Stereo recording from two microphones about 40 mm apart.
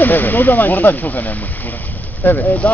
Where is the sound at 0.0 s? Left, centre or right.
Left.